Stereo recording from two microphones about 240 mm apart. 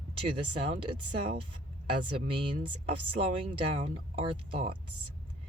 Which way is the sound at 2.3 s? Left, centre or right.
Right.